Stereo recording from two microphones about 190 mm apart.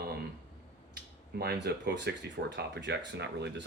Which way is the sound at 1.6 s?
60° right (ahead or behind).